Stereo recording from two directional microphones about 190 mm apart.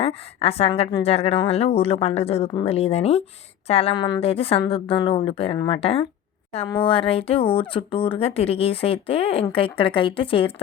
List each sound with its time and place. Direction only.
0.0 s a woman's voice: 30° left (ahead or behind)